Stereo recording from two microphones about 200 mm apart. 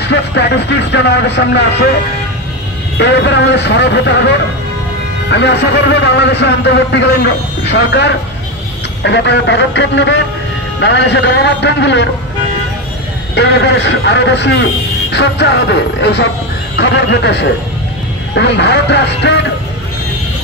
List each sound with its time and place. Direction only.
0.0 s a man's voice: 60° left (ahead or behind)
3.0 s a man's voice: 60° left (ahead or behind)
5.3 s a man's voice: 60° left (ahead or behind)
13.3 s a man's voice: 60° left (ahead or behind)